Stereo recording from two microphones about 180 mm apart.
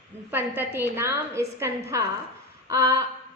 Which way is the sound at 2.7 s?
20° right (ahead or behind).